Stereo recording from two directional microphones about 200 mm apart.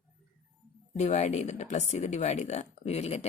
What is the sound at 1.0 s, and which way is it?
Speech, 35° left (ahead or behind).